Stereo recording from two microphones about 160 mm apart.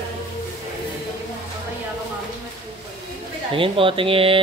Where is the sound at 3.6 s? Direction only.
35° right (ahead or behind).